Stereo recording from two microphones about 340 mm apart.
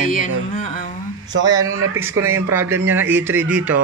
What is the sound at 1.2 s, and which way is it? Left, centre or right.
Speech, centre.